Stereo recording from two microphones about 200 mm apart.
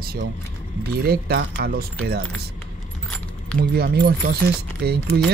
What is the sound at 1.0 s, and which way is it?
Speech, 50° right (ahead or behind).